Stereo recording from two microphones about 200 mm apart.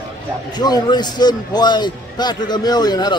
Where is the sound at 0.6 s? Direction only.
20° left (ahead or behind).